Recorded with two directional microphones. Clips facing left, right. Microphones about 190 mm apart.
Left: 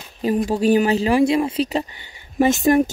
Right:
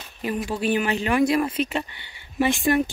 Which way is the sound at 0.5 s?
40° left (ahead or behind).